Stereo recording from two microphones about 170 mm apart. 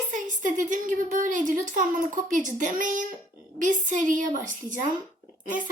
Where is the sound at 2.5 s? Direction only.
50° right (ahead or behind).